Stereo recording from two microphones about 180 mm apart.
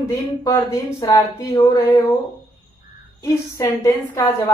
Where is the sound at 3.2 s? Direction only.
20° left (ahead or behind).